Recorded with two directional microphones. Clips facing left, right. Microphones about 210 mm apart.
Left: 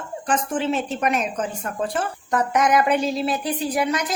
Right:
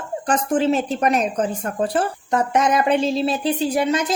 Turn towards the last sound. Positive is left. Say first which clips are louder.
# right 3 dB
turn(degrees=-25)  # may be behind; listen again after turning